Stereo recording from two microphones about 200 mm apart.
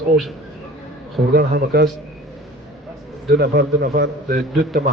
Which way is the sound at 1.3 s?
45° right (ahead or behind).